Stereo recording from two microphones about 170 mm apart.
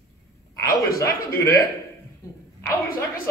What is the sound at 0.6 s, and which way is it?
Speech, 20° left (ahead or behind).